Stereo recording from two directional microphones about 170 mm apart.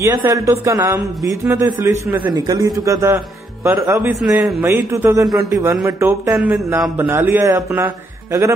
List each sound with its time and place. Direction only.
0.0 s a man's voice: 20° right (ahead or behind)
4.2 s a man's voice: centre (ahead or behind)
4.6 s music: 15° right (ahead or behind)
8.3 s a man's voice: 20° right (ahead or behind)